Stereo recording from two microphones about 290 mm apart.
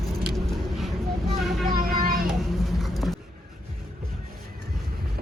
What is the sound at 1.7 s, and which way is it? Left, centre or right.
Child singing, right.